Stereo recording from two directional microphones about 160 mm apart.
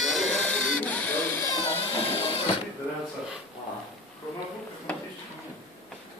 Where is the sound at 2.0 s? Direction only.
40° left (ahead or behind).